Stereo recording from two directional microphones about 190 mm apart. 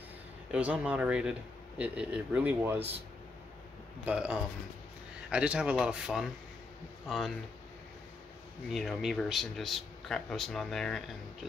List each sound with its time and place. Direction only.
0.5 s speech: 5° right (ahead or behind)
4.0 s speech: 5° right (ahead or behind)
8.6 s speech: centre (ahead or behind)